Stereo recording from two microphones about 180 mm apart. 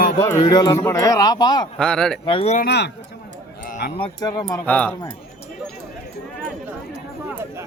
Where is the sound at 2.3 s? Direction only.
30° left (ahead or behind).